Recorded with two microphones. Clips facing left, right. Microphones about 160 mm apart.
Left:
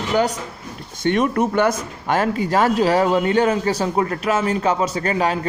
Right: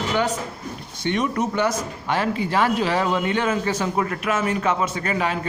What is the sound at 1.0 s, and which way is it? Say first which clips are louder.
Speech: left 5 dB; 50° left (ahead or behind).